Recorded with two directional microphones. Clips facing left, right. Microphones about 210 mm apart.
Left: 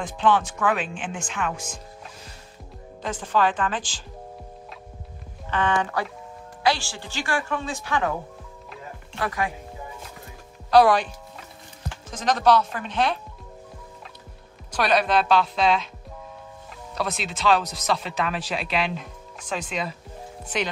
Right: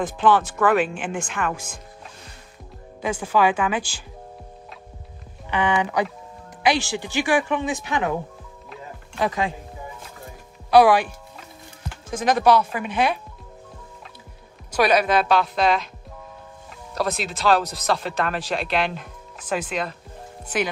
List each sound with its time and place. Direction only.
0.0 s speech: 5° right (ahead or behind)
3.0 s speech: 10° right (ahead or behind)
5.5 s speech: 15° right (ahead or behind)
9.2 s speech: 20° right (ahead or behind)
10.7 s music: 10° right (ahead or behind)
12.1 s speech: 10° right (ahead or behind)
14.7 s speech: 5° right (ahead or behind)
16.9 s speech: centre (ahead or behind)